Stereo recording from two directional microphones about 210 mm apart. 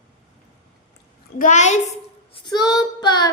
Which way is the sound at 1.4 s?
35° left (ahead or behind).